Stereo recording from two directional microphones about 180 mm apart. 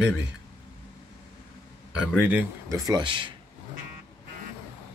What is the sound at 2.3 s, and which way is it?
Speech, 20° right (ahead or behind).